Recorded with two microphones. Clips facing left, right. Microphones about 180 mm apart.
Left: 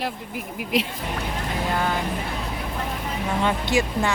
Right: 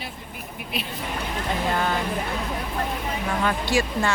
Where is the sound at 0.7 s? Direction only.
90° left.